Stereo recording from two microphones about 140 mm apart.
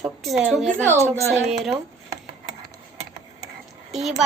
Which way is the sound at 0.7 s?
15° right (ahead or behind).